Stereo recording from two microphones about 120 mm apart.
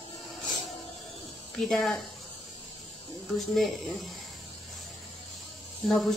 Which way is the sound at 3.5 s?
Centre (ahead or behind).